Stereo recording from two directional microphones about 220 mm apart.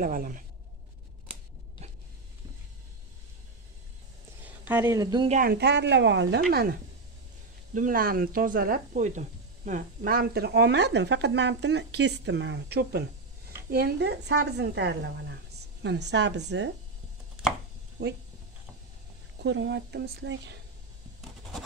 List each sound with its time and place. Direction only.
0.0 s speech: 40° right (ahead or behind)
4.5 s a woman's voice: 10° right (ahead or behind)
5.3 s speech: 40° right (ahead or behind)
6.5 s speech: 45° right (ahead or behind)
18.0 s speech: 50° right (ahead or behind)
19.4 s speech: 55° right (ahead or behind)